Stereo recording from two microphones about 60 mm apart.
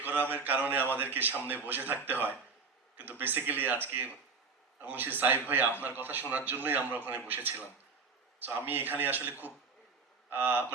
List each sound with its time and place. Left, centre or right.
0.0 s a sound: right
0.9 s speech: right
8.4 s speech: right